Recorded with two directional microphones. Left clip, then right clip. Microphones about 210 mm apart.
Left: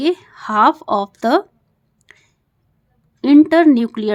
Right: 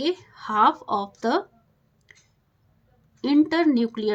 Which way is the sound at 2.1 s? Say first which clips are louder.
Left 6 dB; 40° left (ahead or behind).